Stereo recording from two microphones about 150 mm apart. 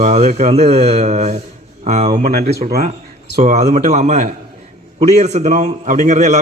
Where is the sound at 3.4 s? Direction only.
50° right (ahead or behind).